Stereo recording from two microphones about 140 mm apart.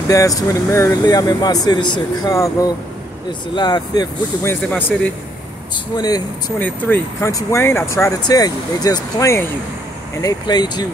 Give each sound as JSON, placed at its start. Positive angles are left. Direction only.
{"t": 0.1, "sound": "speech", "side_deg": 25}
{"t": 4.5, "sound": "speech", "side_deg": 15}
{"t": 5.9, "sound": "speech", "side_deg": 25}
{"t": 6.6, "sound": "speech", "side_deg": 15}
{"t": 10.2, "sound": "speech", "side_deg": 30}